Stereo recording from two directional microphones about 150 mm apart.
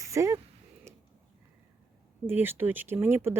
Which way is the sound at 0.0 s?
20° right (ahead or behind).